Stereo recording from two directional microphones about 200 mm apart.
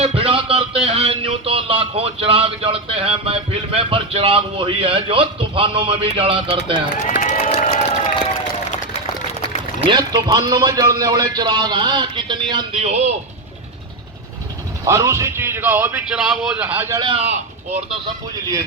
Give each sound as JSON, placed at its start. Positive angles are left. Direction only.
{"t": 0.0, "sound": "a sound", "side_deg": -25}
{"t": 6.9, "sound": "run", "side_deg": 40}
{"t": 9.8, "sound": "a man's voice", "side_deg": -20}
{"t": 14.8, "sound": "speech", "side_deg": -15}
{"t": 17.0, "sound": "speech", "side_deg": -25}